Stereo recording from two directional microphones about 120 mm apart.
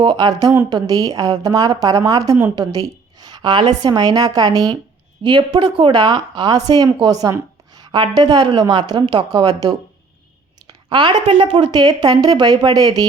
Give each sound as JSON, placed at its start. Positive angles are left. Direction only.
{"t": 0.0, "sound": "speech", "side_deg": -40}
{"t": 2.6, "sound": "a sound", "side_deg": -35}
{"t": 3.8, "sound": "a woman's voice", "side_deg": -35}
{"t": 5.9, "sound": "speech", "side_deg": -35}
{"t": 10.8, "sound": "a woman's voice", "side_deg": -40}
{"t": 11.8, "sound": "speech", "side_deg": -35}